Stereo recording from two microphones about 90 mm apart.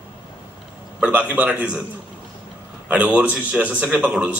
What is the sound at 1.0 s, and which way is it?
Speech, 15° right (ahead or behind).